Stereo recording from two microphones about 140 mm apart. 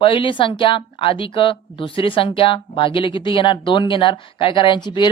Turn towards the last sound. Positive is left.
turn(degrees=35)  # may be behind; listen again after turning